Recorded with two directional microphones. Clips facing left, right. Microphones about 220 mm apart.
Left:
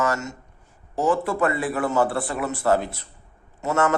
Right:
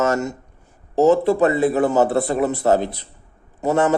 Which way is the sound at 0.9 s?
25° right (ahead or behind).